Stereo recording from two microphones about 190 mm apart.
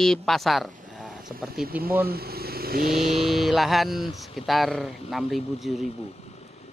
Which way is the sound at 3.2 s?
Centre (ahead or behind).